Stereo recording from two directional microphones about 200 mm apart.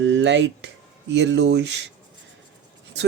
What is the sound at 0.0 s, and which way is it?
Speech, 65° right (ahead or behind).